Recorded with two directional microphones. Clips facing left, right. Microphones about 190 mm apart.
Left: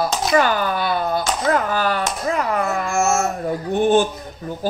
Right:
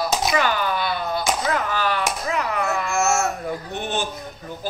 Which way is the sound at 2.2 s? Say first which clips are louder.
Left 5 dB; 45° left (ahead or behind).